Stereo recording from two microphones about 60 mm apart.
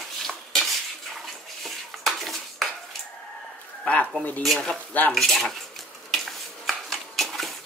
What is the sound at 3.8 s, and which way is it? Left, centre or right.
Speech, left.